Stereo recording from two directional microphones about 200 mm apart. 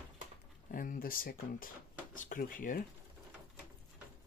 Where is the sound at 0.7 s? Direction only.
45° left (ahead or behind).